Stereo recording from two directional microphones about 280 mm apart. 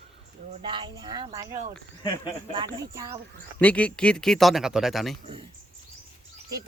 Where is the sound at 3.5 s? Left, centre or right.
Centre.